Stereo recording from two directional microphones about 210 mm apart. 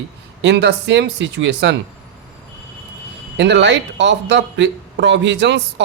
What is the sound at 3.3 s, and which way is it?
Speech, 55° right (ahead or behind).